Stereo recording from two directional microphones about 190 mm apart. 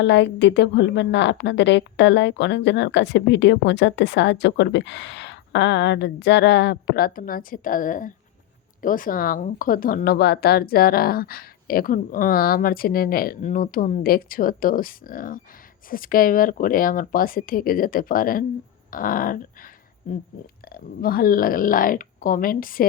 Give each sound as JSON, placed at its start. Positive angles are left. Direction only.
{"t": 0.0, "sound": "a woman's voice", "side_deg": 70}
{"t": 20.7, "sound": "speech", "side_deg": 50}